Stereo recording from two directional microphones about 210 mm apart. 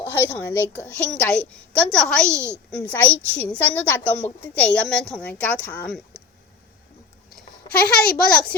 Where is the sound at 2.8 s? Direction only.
10° left (ahead or behind).